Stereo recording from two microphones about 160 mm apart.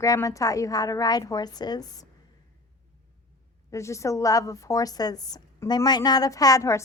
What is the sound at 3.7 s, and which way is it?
A woman's voice, 20° left (ahead or behind).